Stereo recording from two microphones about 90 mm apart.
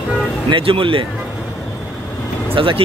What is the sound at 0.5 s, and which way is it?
Speech, 80° right.